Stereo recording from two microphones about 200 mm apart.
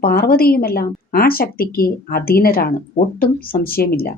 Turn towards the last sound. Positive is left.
turn(degrees=50)  # may be behind; listen again after turning